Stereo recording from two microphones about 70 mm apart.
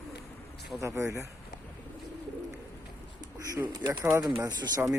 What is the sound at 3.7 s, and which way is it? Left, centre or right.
Speech, right.